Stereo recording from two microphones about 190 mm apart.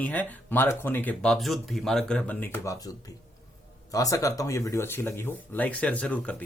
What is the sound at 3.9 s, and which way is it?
Speech, 15° left (ahead or behind).